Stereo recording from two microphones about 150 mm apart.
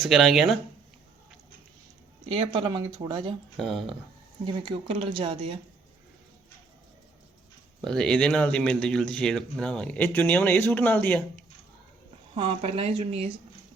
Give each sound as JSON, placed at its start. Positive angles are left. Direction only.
{"t": 0.0, "sound": "speech", "side_deg": 0}
{"t": 2.3, "sound": "speech", "side_deg": -30}
{"t": 3.6, "sound": "speech", "side_deg": 0}
{"t": 5.1, "sound": "speech", "side_deg": -35}
{"t": 7.8, "sound": "a man's voice", "side_deg": 5}
{"t": 12.3, "sound": "speech", "side_deg": -35}